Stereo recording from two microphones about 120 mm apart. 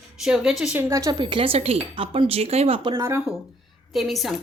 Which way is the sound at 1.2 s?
45° right (ahead or behind).